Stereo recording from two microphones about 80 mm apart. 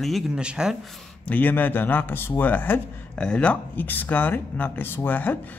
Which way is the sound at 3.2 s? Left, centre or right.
Centre.